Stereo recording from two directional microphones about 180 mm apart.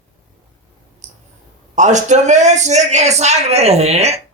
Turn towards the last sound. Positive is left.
turn(degrees=-35)  # may be behind; listen again after turning